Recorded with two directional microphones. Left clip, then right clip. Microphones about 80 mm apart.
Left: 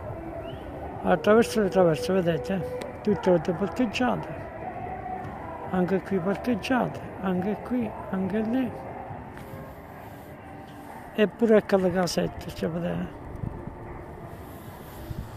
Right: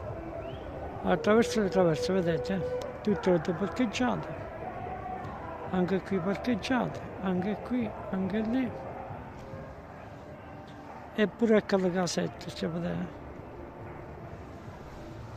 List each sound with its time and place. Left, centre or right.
1.0 s speech: centre
4.6 s a sound: centre
5.7 s speech: centre
11.1 s speech: centre